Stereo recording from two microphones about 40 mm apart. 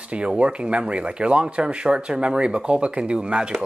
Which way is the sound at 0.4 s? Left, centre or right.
Right.